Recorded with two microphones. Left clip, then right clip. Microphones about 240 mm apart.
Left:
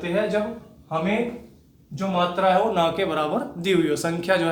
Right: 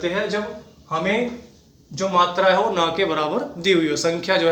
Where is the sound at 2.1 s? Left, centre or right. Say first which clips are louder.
Right 3 dB; left.